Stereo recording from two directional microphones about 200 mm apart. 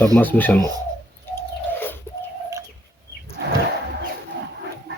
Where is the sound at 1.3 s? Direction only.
10° left (ahead or behind).